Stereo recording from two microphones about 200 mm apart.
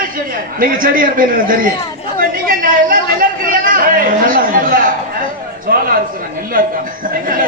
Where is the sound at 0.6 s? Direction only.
45° right (ahead or behind).